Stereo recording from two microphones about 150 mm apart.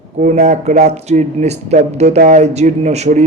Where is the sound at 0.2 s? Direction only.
50° right (ahead or behind).